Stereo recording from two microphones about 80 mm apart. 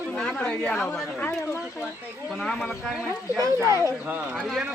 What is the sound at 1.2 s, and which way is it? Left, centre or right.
Speech, left.